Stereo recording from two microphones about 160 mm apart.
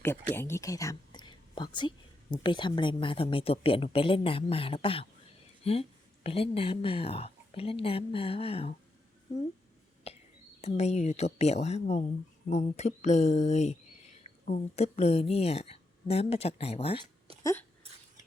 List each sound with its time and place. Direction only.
0.0 s a woman's voice: 15° left (ahead or behind); by 8.7 s 35° left (ahead or behind)
10.1 s a sound: 40° left (ahead or behind)
10.6 s a woman's voice: 45° left (ahead or behind)
17.4 s speech: 10° left (ahead or behind)